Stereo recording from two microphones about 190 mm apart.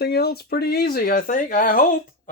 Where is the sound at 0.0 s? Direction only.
55° left (ahead or behind).